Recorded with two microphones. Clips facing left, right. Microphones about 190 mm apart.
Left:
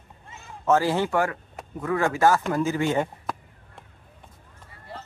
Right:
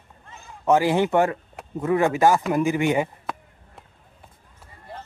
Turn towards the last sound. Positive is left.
turn(degrees=-15)  # may be behind; listen again after turning